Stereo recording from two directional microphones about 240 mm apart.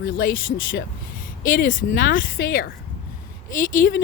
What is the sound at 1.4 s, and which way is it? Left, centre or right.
Speech, left.